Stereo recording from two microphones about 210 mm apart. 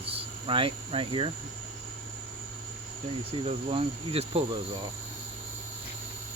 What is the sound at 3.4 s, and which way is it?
Speech, 30° right (ahead or behind).